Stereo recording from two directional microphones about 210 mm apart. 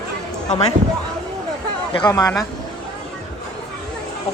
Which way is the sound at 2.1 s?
15° left (ahead or behind).